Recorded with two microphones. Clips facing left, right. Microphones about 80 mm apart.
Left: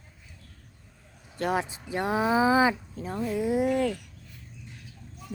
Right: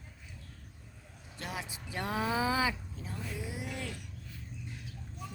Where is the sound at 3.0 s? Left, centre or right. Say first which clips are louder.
Left 13 dB; left.